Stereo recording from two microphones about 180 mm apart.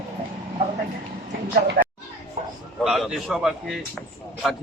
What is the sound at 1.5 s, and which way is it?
Speech, 55° right (ahead or behind).